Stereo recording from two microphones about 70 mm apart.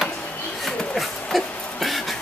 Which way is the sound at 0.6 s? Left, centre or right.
Centre.